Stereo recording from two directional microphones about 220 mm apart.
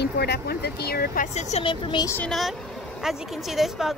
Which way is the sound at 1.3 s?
30° left (ahead or behind).